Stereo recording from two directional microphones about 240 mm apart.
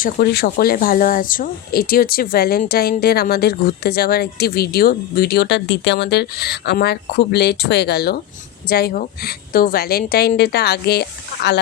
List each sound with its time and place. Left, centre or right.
0.0 s speech: left